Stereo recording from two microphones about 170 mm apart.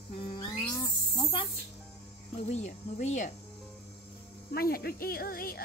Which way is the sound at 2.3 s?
40° left (ahead or behind).